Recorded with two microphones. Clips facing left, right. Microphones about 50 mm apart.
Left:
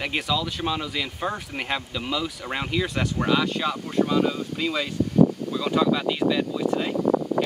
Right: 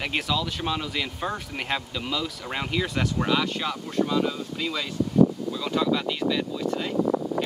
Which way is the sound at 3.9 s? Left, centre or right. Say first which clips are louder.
Left 2 dB; centre.